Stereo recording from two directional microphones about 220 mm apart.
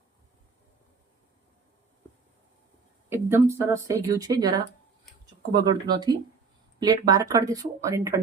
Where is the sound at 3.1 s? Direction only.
10° right (ahead or behind).